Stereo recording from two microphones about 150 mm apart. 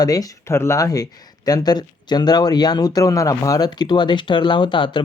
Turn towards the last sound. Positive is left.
turn(degrees=35)  # may be behind; listen again after turning